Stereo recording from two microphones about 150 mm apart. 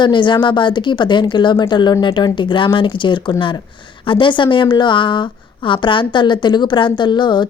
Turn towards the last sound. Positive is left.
turn(degrees=30)  # may be behind; listen again after turning